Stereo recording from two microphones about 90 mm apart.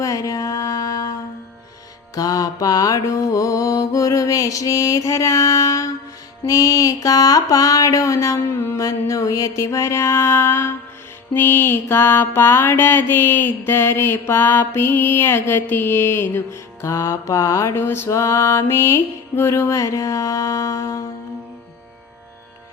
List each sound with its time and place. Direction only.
0.0 s music: 40° left (ahead or behind)
2.1 s mantra: 40° left (ahead or behind)